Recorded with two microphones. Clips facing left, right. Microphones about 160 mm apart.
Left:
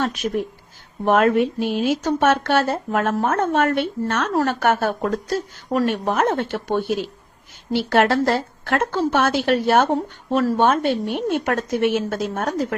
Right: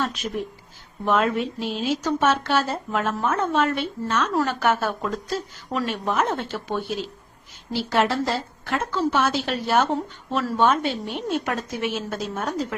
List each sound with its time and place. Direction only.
0.0 s a woman's voice: 55° left (ahead or behind)